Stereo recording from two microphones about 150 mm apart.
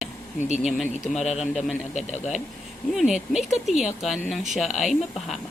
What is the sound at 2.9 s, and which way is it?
Speech, 5° right (ahead or behind).